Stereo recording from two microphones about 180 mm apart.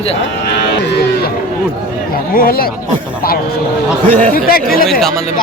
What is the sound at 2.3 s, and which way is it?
Speech, 55° left (ahead or behind).